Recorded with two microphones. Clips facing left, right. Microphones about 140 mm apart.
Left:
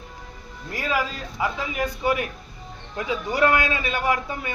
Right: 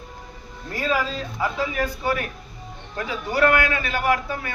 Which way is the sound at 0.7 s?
10° left (ahead or behind).